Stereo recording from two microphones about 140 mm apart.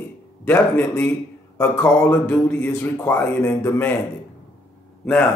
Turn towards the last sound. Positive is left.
turn(degrees=10)  # may be behind; listen again after turning